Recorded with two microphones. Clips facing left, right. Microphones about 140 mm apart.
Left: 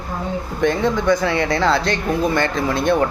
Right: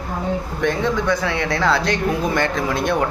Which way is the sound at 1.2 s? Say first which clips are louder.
Left 2 dB; centre (ahead or behind).